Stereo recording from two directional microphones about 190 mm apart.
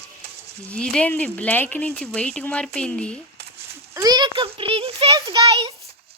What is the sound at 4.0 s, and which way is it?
A child's voice, 20° right (ahead or behind).